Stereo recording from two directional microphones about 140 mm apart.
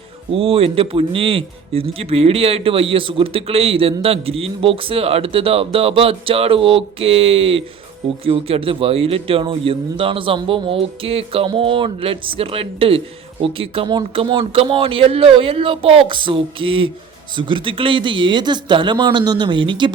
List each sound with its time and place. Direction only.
0.3 s a man's voice: 40° right (ahead or behind)